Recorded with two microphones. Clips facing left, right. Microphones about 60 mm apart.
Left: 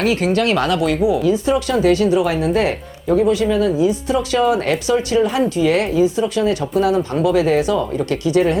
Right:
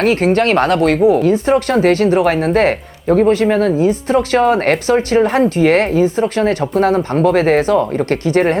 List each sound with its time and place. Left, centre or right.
0.0 s speech: right